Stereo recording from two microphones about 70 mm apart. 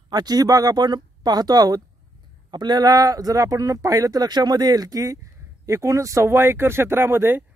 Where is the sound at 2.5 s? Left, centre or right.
Right.